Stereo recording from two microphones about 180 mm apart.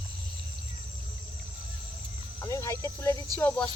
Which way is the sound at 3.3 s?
10° left (ahead or behind).